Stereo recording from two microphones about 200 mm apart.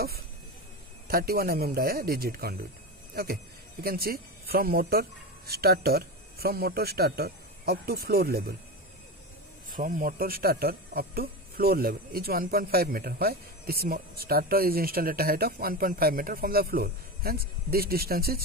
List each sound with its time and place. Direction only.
1.0 s speech: 50° right (ahead or behind)
3.8 s speech: 50° right (ahead or behind)
9.7 s speech: 40° right (ahead or behind)